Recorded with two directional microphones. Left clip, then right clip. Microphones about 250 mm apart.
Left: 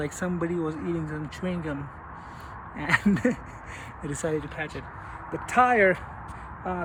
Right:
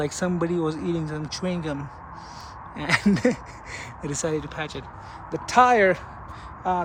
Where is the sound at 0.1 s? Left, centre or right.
Centre.